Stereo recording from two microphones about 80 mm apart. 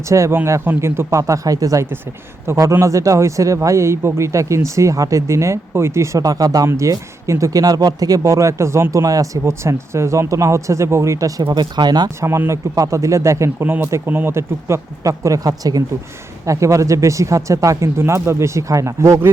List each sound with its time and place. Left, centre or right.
0.1 s speech: right
11.5 s speech: right
12.0 s speech: right
13.7 s speech: right